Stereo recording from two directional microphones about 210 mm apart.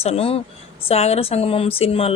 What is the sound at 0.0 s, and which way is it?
Speech, 30° left (ahead or behind).